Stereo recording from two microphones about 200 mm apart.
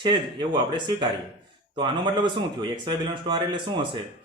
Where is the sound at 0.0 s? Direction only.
20° right (ahead or behind).